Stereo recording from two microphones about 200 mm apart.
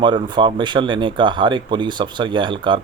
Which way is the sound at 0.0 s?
20° right (ahead or behind).